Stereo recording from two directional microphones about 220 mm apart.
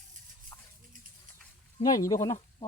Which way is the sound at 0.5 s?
15° left (ahead or behind).